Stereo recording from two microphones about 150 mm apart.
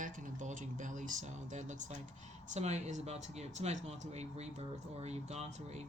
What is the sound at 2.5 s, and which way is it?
Speech, 50° right (ahead or behind).